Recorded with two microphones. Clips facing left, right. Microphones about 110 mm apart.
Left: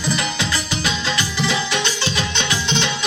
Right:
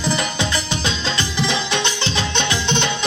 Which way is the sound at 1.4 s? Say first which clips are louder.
Right 1 dB; 20° right (ahead or behind).